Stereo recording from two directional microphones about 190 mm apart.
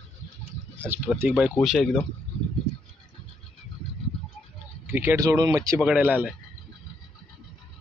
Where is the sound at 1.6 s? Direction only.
Centre (ahead or behind).